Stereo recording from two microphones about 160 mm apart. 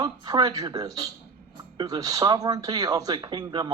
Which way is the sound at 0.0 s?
25° right (ahead or behind).